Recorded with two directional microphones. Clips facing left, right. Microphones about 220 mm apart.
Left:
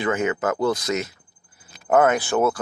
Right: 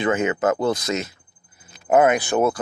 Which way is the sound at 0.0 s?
20° right (ahead or behind).